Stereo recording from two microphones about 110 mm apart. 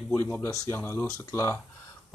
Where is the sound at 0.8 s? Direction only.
20° left (ahead or behind).